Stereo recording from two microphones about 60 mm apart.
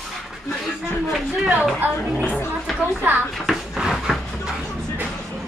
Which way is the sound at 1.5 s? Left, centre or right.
Right.